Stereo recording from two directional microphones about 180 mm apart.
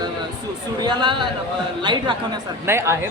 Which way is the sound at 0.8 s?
25° right (ahead or behind).